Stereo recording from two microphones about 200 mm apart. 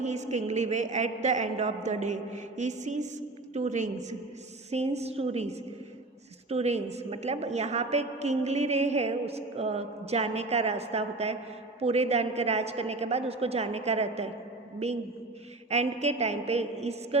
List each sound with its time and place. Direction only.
0.0 s a woman's voice: 35° right (ahead or behind)